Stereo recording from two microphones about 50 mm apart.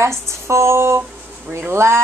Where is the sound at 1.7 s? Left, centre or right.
Right.